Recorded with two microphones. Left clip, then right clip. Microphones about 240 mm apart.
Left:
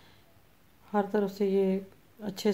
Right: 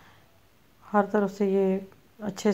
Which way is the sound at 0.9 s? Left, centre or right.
Centre.